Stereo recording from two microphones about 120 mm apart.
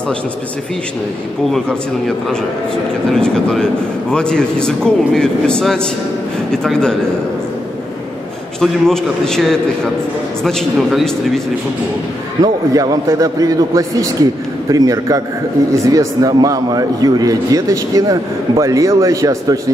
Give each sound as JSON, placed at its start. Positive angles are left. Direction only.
{"t": 1.4, "sound": "a man's voice", "side_deg": 5}
{"t": 8.5, "sound": "a man's voice", "side_deg": 5}
{"t": 12.4, "sound": "a man's voice", "side_deg": -30}